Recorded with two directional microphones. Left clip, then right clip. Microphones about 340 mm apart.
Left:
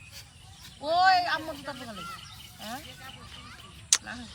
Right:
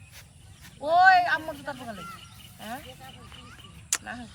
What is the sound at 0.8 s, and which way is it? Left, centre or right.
Speech, centre.